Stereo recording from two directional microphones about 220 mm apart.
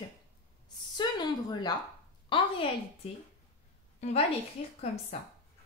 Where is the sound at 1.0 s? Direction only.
20° left (ahead or behind).